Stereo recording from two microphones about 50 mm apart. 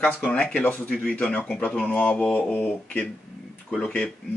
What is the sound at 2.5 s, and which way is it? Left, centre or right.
Speech, left.